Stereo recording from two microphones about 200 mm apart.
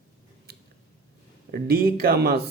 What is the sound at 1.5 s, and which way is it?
Speech, 50° right (ahead or behind).